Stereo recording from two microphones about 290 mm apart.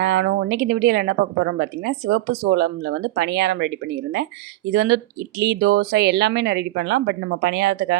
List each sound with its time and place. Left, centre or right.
0.0 s speech: right
4.7 s speech: right